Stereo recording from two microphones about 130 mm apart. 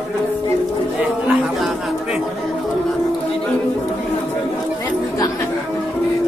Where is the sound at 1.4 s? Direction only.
Centre (ahead or behind).